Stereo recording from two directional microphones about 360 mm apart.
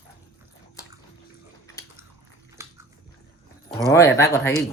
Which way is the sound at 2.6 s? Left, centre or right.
Centre.